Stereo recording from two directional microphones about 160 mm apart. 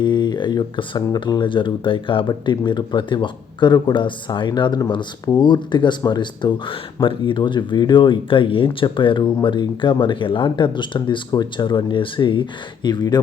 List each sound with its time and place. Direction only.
0.0 s speech: 30° left (ahead or behind)